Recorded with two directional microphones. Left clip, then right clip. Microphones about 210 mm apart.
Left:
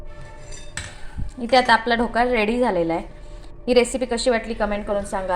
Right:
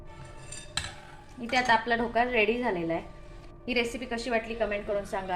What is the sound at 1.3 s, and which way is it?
A woman's voice, 20° left (ahead or behind).